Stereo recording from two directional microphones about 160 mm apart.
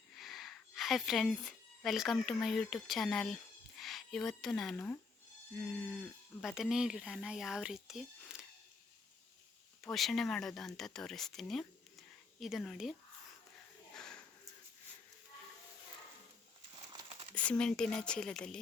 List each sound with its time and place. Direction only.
0.2 s speech: centre (ahead or behind)
9.8 s speech: centre (ahead or behind)
13.9 s a sound: 5° left (ahead or behind)
16.9 s crumpling: 35° right (ahead or behind)
17.3 s speech: 5° left (ahead or behind)